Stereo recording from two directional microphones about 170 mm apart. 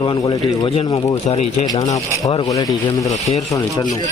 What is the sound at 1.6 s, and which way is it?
Speech, 20° left (ahead or behind).